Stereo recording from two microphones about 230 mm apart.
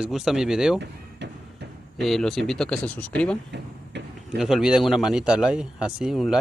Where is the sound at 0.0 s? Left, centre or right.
Centre.